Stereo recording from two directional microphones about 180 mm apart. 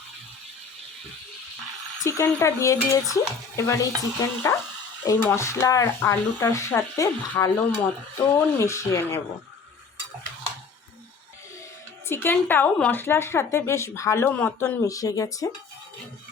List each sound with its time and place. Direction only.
2.0 s a woman's voice: 15° left (ahead or behind)
12.0 s a woman's voice: 10° left (ahead or behind)